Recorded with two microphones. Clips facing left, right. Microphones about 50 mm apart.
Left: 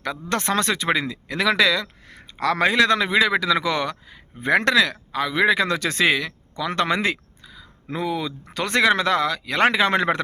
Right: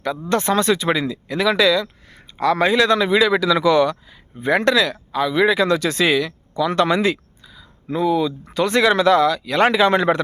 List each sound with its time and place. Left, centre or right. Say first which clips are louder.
0.3 s speech: right 5 dB; left
7.9 s speech: right 7 dB; left